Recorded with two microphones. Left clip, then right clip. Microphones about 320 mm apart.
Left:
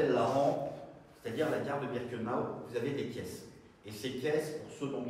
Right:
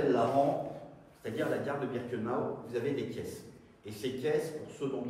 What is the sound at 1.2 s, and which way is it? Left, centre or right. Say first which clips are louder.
A man's voice: even; centre.